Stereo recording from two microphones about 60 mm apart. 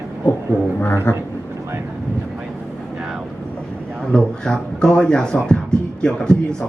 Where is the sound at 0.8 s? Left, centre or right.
Left.